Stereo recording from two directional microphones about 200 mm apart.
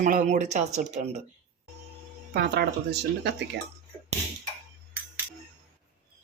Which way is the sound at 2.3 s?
55° right (ahead or behind).